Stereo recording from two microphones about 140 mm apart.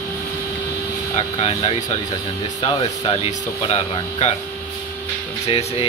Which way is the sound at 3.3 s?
50° left (ahead or behind).